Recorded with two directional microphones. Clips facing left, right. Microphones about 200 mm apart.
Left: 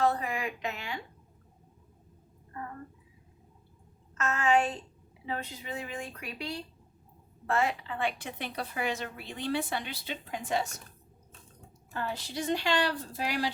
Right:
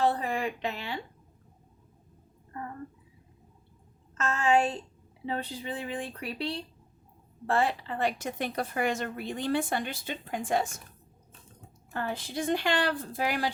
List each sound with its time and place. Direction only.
0.0 s a woman's voice: 30° right (ahead or behind)
4.2 s speech: 30° right (ahead or behind); by 10.8 s 50° right (ahead or behind)
11.9 s speech: 55° right (ahead or behind)